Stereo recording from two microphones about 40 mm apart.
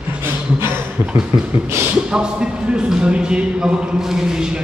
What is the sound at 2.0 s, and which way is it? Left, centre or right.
A man's voice, right.